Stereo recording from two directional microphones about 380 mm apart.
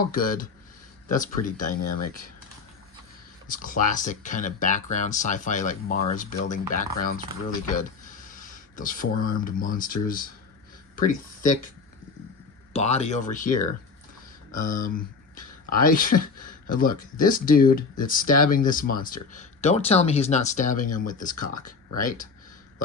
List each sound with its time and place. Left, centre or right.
0.0 s speech: left
3.5 s speech: left
12.7 s speech: centre
14.5 s speech: left